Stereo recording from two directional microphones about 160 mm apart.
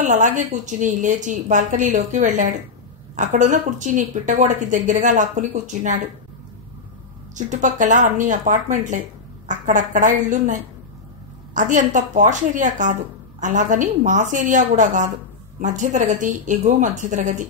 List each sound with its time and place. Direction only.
0.0 s speech: 50° right (ahead or behind)
7.3 s speech: 50° right (ahead or behind)
11.5 s speech: 50° right (ahead or behind)